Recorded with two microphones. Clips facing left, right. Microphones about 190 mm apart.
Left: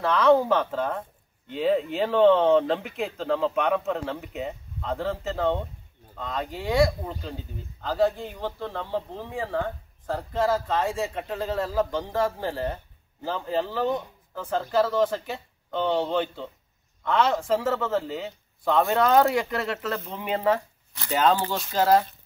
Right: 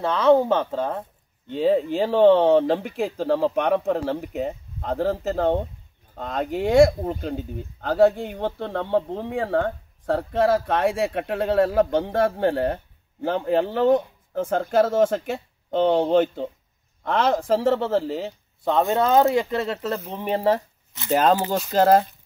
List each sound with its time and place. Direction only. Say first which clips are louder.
0.0 s speech: right 2 dB; 25° right (ahead or behind)
21.1 s speech: right 3 dB; 45° right (ahead or behind)